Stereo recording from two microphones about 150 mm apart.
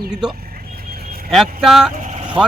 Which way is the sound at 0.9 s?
85° right.